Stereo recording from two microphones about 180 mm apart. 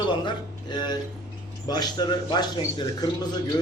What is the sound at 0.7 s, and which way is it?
Speech, 25° left (ahead or behind).